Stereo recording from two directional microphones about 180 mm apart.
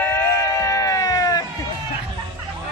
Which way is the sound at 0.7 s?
20° left (ahead or behind).